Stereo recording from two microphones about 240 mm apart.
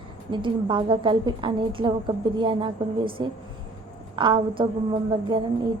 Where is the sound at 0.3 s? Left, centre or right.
Centre.